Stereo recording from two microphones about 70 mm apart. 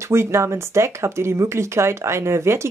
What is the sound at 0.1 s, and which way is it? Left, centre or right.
Speech, right.